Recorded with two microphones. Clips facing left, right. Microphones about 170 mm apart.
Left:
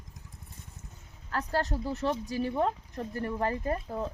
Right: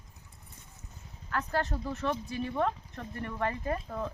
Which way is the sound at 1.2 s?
35° left (ahead or behind).